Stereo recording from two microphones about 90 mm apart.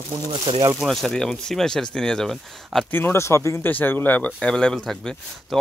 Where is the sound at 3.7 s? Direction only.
20° left (ahead or behind); by 5.6 s 5° left (ahead or behind).